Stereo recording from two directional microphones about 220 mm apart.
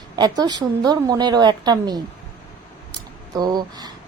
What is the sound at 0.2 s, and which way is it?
A woman's voice, 20° right (ahead or behind).